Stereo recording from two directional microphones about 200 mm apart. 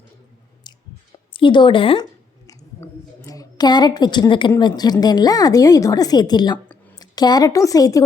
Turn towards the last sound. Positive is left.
turn(degrees=15)  # may be behind; listen again after turning